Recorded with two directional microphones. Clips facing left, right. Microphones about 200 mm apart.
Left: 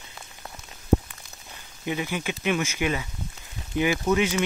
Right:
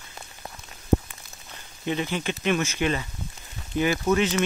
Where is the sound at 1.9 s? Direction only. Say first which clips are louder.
Right 1 dB; 10° left (ahead or behind).